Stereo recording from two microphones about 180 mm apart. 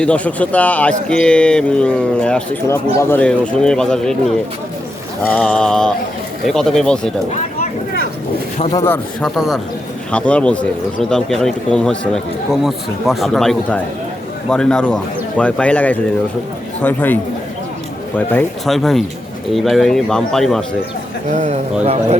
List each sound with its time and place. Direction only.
0.0 s a man's voice: 5° left (ahead or behind)
5.3 s speech: 5° left (ahead or behind)
8.7 s a man's voice: 15° left (ahead or behind)
9.2 s a man's voice: centre (ahead or behind)
18.2 s speech: 10° left (ahead or behind)
21.3 s speech: 40° right (ahead or behind)